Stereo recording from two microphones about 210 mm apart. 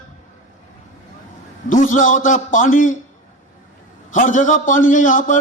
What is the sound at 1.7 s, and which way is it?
A man's voice, 35° left (ahead or behind).